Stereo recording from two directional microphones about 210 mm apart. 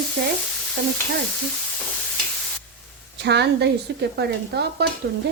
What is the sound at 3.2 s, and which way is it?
A woman's voice, 55° right (ahead or behind).